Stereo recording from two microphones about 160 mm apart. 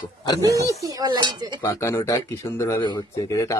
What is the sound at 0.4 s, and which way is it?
Speech, 20° right (ahead or behind).